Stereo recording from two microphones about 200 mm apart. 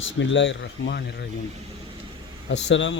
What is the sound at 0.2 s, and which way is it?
Speech, 65° left (ahead or behind).